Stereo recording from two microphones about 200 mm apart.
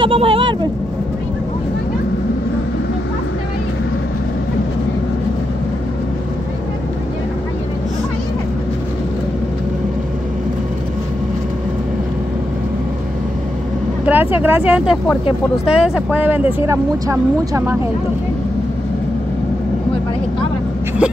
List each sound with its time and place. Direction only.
0.0 s speech: 25° right (ahead or behind)
14.0 s speech: 10° right (ahead or behind)